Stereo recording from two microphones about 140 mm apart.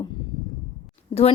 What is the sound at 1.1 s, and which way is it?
Speech, 30° left (ahead or behind).